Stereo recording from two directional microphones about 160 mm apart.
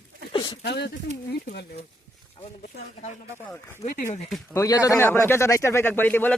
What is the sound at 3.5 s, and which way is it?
Speech, 15° left (ahead or behind).